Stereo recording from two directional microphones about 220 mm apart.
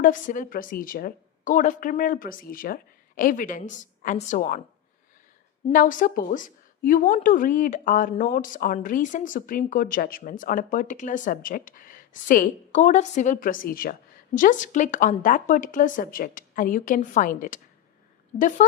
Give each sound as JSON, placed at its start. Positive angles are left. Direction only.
{"t": 0.0, "sound": "a woman's voice", "side_deg": 35}
{"t": 5.7, "sound": "a woman's voice", "side_deg": 35}